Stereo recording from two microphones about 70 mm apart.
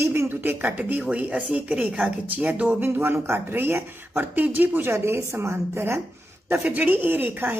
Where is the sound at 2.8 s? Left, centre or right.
Right.